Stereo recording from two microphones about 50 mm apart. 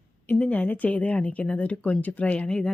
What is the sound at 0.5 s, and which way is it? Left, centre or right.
Speech, left.